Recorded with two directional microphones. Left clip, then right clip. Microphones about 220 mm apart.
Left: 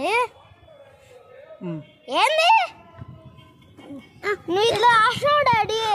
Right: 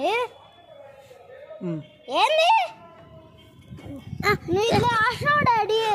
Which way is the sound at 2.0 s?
45° left (ahead or behind).